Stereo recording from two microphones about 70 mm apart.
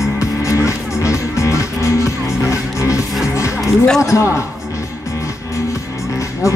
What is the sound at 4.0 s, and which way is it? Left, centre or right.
Speech, left.